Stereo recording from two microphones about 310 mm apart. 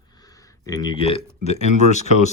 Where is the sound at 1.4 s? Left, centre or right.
Left.